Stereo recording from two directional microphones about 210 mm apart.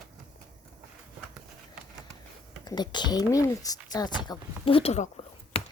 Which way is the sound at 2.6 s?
20° left (ahead or behind).